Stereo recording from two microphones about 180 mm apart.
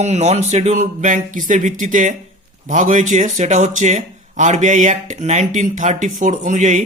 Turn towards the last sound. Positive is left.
turn(degrees=-45)  # may be behind; listen again after turning